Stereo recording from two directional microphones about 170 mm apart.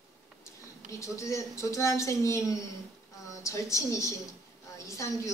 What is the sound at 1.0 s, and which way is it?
A woman's voice, 15° left (ahead or behind).